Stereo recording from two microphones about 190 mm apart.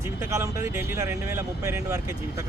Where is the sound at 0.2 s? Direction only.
15° right (ahead or behind).